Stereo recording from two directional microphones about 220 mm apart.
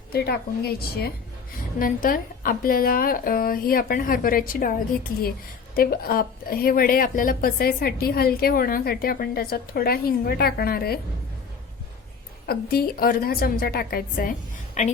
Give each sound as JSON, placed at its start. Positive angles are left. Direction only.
{"t": 0.1, "sound": "a woman's voice", "side_deg": 45}
{"t": 12.5, "sound": "a woman's voice", "side_deg": 45}
{"t": 14.8, "sound": "a woman's voice", "side_deg": 30}